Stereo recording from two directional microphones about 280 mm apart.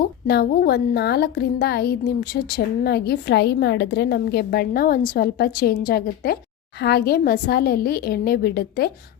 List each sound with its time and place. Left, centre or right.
0.0 s a woman's voice: left